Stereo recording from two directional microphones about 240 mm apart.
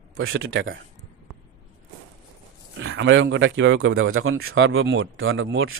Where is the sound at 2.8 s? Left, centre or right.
Right.